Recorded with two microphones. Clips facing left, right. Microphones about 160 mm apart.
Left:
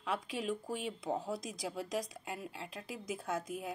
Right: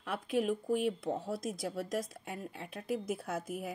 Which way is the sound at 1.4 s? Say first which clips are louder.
Right 4 dB; 50° right (ahead or behind).